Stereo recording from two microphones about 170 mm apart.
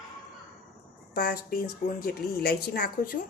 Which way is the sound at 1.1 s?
60° left (ahead or behind).